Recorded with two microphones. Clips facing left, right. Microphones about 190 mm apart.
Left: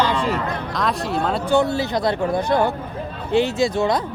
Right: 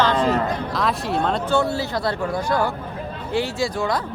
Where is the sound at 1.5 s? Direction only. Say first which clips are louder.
Left 3 dB; 15° left (ahead or behind).